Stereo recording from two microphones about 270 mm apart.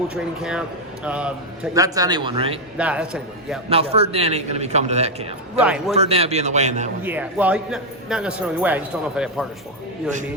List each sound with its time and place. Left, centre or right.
0.1 s a man's voice: centre
2.7 s a man's voice: centre
3.7 s a man's voice: right
5.5 s a man's voice: centre
5.9 s a man's voice: right
7.0 s a man's voice: centre